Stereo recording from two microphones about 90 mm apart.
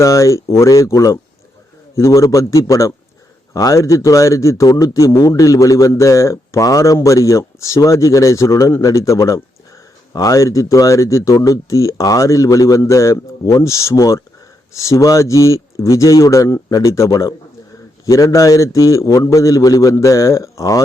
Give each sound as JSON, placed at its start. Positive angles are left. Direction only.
{"t": 0.0, "sound": "a man's voice", "side_deg": 35}